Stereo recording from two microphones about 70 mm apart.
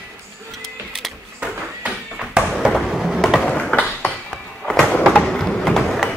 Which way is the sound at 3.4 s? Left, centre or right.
Centre.